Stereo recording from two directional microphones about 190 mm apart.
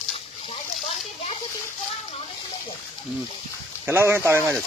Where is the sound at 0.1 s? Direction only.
30° left (ahead or behind).